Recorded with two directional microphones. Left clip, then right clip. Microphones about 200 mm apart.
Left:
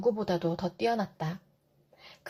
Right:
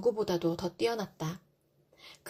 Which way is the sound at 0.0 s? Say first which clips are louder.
Left 1 dB; 35° right (ahead or behind).